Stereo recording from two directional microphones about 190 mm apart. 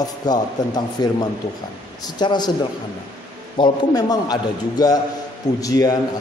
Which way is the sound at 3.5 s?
20° left (ahead or behind).